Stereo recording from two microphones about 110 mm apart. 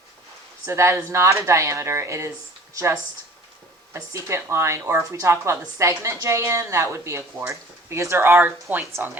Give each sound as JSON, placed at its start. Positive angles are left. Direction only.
{"t": 0.6, "sound": "speech", "side_deg": -25}
{"t": 3.9, "sound": "speech", "side_deg": -25}